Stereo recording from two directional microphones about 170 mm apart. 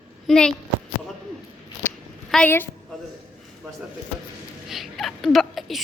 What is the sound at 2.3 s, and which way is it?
Speech, 10° left (ahead or behind).